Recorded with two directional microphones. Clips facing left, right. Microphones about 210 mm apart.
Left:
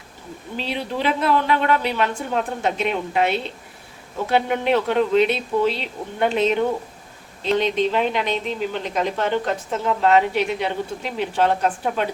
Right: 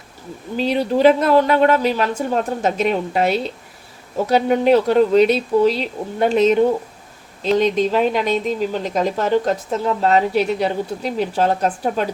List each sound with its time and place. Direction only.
0.5 s speech: 45° right (ahead or behind)